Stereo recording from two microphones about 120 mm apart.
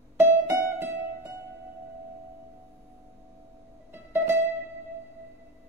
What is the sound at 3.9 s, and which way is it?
Music, 20° right (ahead or behind).